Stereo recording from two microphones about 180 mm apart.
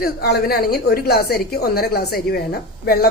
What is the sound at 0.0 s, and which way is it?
Speech, 65° left (ahead or behind).